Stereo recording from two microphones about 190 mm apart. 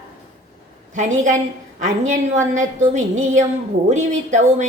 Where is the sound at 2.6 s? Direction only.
40° right (ahead or behind).